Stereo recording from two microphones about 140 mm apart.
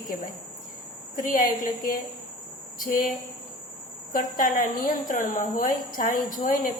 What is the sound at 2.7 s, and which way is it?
Speech, 75° left (ahead or behind).